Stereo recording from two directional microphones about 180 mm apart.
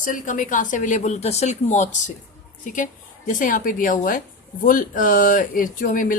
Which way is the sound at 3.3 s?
50° left (ahead or behind).